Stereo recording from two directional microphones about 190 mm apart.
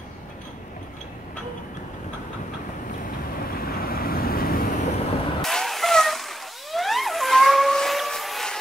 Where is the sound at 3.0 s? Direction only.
50° left (ahead or behind).